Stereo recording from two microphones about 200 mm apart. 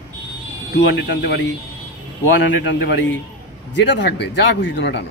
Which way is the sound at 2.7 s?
60° left (ahead or behind).